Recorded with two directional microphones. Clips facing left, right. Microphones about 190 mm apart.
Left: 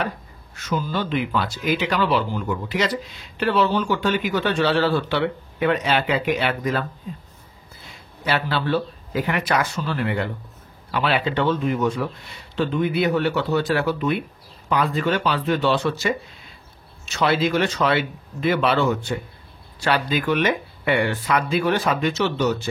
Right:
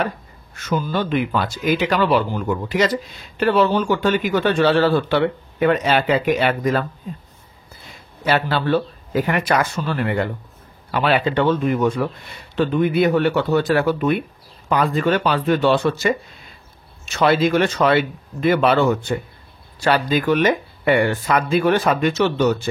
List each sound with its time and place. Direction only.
0.7 s speech: 50° right (ahead or behind)
8.3 s speech: 45° right (ahead or behind)